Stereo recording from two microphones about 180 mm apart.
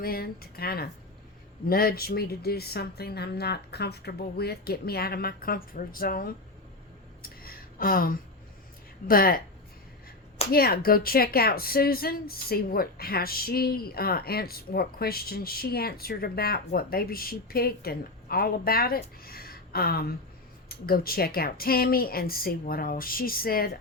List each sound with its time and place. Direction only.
0.0 s speech: 55° left (ahead or behind)
7.2 s a sound: 55° left (ahead or behind)
9.0 s speech: 55° left (ahead or behind)
10.5 s speech: 55° left (ahead or behind)